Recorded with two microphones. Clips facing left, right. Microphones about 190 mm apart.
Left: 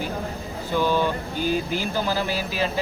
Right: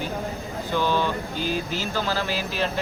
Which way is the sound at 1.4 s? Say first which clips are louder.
Left 5 dB; 50° left (ahead or behind).